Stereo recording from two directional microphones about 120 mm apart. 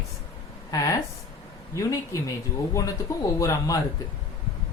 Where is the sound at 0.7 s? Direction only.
25° left (ahead or behind).